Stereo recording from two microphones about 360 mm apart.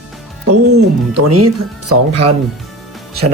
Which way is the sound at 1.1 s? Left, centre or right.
Right.